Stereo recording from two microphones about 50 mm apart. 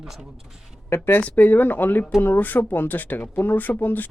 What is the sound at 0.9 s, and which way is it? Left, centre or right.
Speech, left.